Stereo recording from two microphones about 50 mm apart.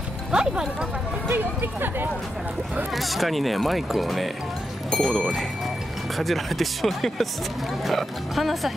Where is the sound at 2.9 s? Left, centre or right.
Centre.